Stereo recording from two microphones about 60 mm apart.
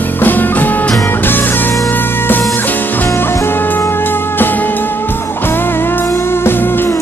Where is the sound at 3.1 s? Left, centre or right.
Left.